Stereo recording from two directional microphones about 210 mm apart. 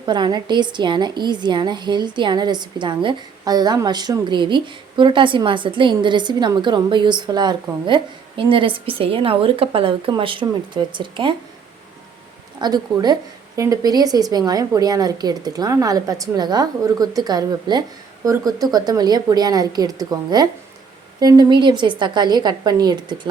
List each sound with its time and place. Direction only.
0.0 s a woman's voice: 20° right (ahead or behind)
12.5 s a woman's voice: 20° right (ahead or behind)